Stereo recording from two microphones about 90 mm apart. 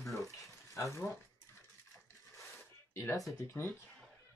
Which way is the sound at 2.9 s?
30° left (ahead or behind).